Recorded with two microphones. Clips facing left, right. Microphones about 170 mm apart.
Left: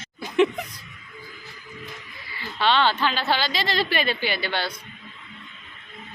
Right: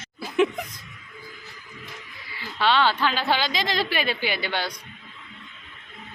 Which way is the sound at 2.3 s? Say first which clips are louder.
Even; 10° right (ahead or behind).